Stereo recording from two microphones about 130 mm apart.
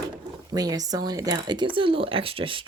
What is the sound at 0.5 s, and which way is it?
Speech, 30° right (ahead or behind).